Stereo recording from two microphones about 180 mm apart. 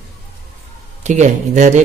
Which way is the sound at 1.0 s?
40° right (ahead or behind).